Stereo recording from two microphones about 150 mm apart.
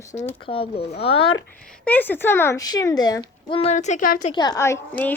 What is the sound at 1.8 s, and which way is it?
A child's voice, 10° left (ahead or behind).